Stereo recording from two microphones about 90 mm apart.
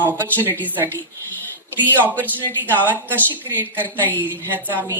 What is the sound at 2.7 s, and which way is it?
Speech, 20° left (ahead or behind).